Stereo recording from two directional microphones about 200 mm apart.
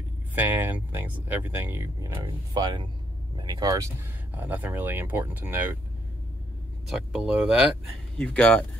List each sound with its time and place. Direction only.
0.3 s speech: 10° right (ahead or behind)
6.9 s speech: 5° right (ahead or behind)
8.2 s speech: 5° left (ahead or behind)